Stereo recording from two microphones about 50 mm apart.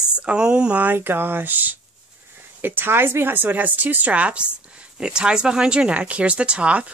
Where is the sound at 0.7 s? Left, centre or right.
Right.